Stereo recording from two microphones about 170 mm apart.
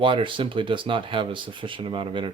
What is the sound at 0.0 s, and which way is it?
Speech, 30° right (ahead or behind).